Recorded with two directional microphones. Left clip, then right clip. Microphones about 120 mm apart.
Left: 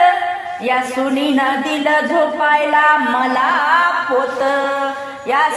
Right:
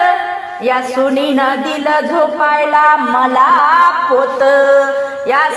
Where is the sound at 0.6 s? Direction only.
30° right (ahead or behind).